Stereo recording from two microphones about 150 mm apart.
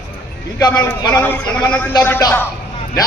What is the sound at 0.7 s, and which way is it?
A man's voice, 10° left (ahead or behind).